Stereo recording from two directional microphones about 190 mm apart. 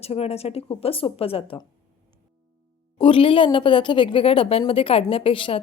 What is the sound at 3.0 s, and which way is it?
A woman's voice, 25° left (ahead or behind).